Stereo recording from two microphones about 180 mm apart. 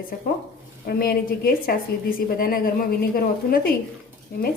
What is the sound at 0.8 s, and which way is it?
A woman's voice, 55° left (ahead or behind).